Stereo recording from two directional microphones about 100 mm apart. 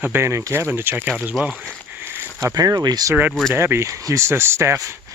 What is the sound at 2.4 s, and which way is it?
Speech, 40° right (ahead or behind).